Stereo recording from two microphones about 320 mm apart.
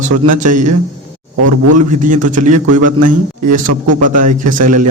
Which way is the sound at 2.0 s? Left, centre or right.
Right.